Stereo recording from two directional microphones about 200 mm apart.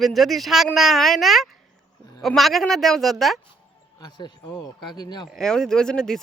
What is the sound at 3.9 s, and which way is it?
Speech, 20° left (ahead or behind).